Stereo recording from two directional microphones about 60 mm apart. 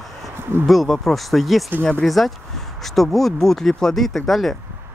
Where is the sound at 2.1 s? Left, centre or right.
Centre.